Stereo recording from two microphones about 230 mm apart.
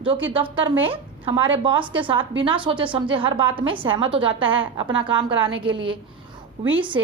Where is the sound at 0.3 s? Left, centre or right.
Right.